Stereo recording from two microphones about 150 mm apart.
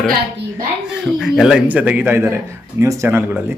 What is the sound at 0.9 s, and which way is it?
Speech, centre (ahead or behind).